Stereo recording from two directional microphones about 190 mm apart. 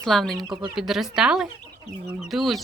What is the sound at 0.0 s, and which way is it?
Speech, centre (ahead or behind).